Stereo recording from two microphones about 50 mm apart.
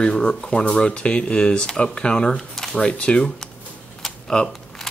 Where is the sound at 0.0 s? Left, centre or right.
Centre.